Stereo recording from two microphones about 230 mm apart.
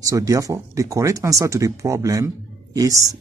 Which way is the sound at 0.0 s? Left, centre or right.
Centre.